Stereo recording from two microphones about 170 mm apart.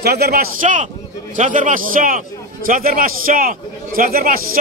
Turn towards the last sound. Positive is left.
turn(degrees=-60)  # may be behind; listen again after turning